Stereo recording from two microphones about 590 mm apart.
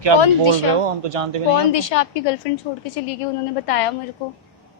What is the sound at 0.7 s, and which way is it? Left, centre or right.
Speech, right.